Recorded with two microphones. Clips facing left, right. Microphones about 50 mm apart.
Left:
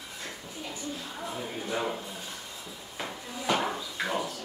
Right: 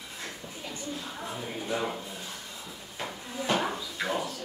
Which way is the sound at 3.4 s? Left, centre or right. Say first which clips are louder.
Even; centre.